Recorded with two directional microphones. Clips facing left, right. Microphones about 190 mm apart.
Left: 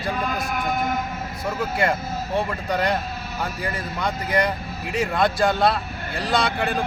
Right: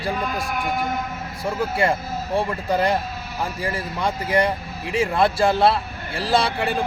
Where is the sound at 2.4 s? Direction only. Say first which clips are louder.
Right 3 dB; 30° right (ahead or behind).